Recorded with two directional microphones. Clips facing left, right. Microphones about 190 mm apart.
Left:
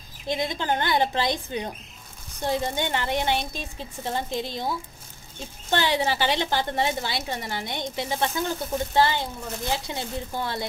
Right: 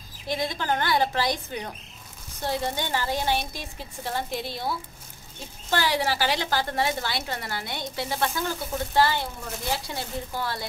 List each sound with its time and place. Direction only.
0.3 s a woman's voice: 20° left (ahead or behind)